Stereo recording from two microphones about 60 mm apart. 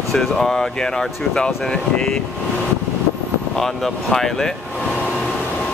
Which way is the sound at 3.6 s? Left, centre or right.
Centre.